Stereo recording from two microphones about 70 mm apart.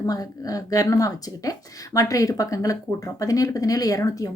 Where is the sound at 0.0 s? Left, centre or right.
Left.